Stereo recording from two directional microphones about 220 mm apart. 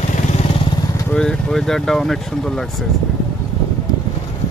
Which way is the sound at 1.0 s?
5° left (ahead or behind).